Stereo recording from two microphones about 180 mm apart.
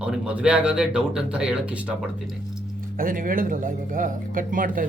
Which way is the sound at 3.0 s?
50° right (ahead or behind).